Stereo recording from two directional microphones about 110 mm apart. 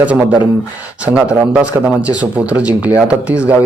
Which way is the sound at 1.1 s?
30° right (ahead or behind).